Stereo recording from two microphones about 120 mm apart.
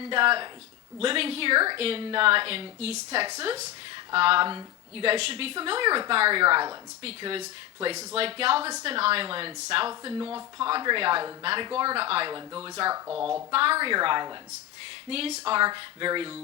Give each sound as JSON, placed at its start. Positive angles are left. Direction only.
{"t": 0.0, "sound": "a woman's voice", "side_deg": -45}
{"t": 9.9, "sound": "a woman's voice", "side_deg": -35}
{"t": 11.9, "sound": "a woman's voice", "side_deg": -55}
{"t": 13.1, "sound": "speech", "side_deg": -5}
{"t": 13.5, "sound": "a woman's voice", "side_deg": -50}
{"t": 15.1, "sound": "a woman's voice", "side_deg": -55}
{"t": 15.6, "sound": "a woman's voice", "side_deg": -40}